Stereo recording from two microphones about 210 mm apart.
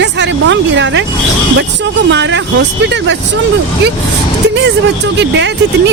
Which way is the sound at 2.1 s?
60° right (ahead or behind).